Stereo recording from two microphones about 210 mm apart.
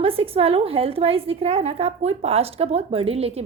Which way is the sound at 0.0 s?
25° right (ahead or behind).